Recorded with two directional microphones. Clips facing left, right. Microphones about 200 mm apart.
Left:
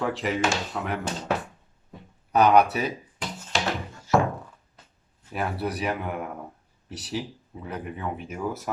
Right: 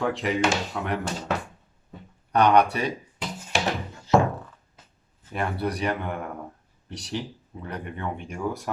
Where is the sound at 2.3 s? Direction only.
5° left (ahead or behind).